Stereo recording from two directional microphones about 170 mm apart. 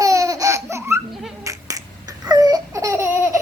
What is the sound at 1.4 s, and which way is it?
Babbling, 20° right (ahead or behind).